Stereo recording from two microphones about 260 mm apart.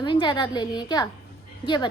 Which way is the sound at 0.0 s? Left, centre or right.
Centre.